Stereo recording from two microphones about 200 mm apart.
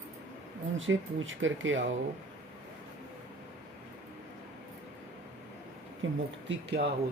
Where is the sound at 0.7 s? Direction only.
75° right (ahead or behind).